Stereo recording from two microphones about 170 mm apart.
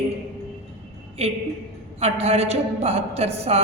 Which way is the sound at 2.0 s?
40° right (ahead or behind).